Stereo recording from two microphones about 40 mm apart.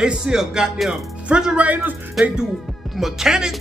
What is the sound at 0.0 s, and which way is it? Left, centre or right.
Music, centre.